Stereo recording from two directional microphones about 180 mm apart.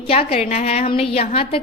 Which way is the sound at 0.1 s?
35° left (ahead or behind).